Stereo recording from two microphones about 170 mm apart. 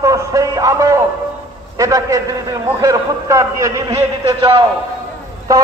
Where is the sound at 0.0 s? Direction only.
20° right (ahead or behind).